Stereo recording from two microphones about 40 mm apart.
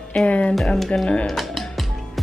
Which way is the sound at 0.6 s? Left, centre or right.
Centre.